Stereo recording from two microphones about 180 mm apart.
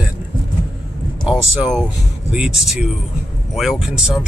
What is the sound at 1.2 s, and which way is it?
Speech, centre (ahead or behind).